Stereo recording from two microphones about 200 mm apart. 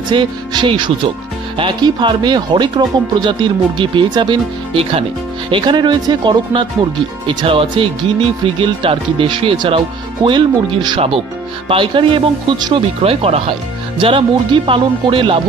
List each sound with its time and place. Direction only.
0.1 s speech: 25° right (ahead or behind)